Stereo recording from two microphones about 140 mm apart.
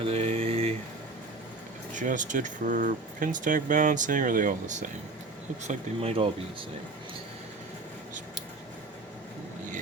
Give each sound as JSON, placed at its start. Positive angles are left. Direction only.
{"t": 0.0, "sound": "mantra", "side_deg": -45}
{"t": 1.9, "sound": "speech", "side_deg": -65}
{"t": 5.6, "sound": "speech", "side_deg": -45}